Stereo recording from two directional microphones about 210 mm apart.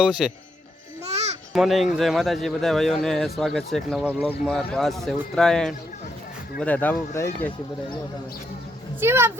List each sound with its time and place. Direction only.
0.0 s speech: 5° right (ahead or behind)
1.1 s babbling: 30° right (ahead or behind)
1.5 s speech: centre (ahead or behind)
9.0 s speech: 10° right (ahead or behind)